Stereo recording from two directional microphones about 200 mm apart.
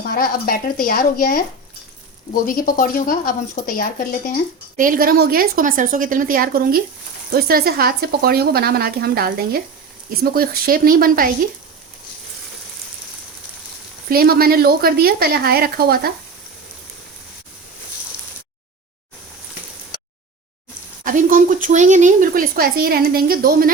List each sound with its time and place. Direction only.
0.1 s speech: 45° left (ahead or behind)
2.5 s speech: 45° left (ahead or behind)
4.8 s speech: 45° right (ahead or behind)
14.1 s speech: 50° right (ahead or behind)
21.0 s speech: 40° right (ahead or behind)